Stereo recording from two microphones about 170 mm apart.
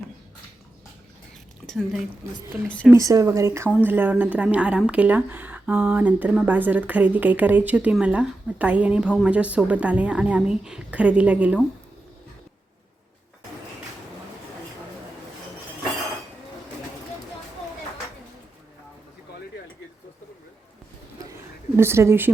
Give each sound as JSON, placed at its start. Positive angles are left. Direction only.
{"t": 1.6, "sound": "speech", "side_deg": 0}
{"t": 2.9, "sound": "speech", "side_deg": -20}
{"t": 21.8, "sound": "speech", "side_deg": -15}